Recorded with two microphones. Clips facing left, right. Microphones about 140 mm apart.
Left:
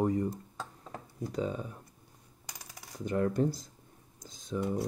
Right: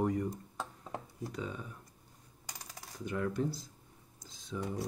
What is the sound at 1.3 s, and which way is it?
Speech, 35° left (ahead or behind).